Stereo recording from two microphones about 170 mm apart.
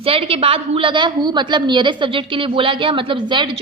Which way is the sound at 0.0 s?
35° right (ahead or behind).